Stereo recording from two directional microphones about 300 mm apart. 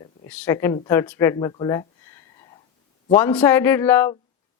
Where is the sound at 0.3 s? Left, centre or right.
Centre.